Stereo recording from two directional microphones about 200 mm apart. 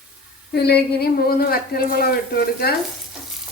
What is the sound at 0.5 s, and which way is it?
A woman's voice, 55° left (ahead or behind).